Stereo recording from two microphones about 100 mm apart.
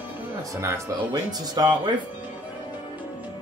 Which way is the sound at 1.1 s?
45° right (ahead or behind).